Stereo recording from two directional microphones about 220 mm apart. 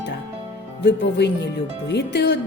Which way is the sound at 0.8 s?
50° left (ahead or behind).